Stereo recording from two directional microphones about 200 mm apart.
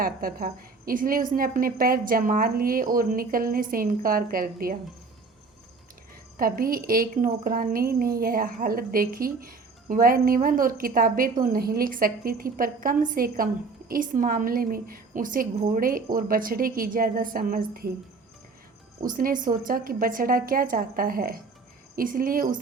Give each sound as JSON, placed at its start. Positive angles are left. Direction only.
{"t": 0.0, "sound": "a woman's voice", "side_deg": -45}
{"t": 6.3, "sound": "a woman's voice", "side_deg": -45}
{"t": 18.9, "sound": "a woman's voice", "side_deg": -45}